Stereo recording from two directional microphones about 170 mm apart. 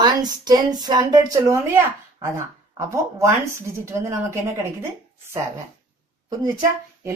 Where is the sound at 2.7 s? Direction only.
15° right (ahead or behind).